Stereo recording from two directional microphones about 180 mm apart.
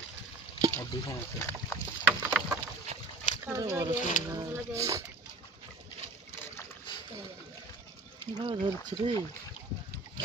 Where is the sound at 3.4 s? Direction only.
15° right (ahead or behind).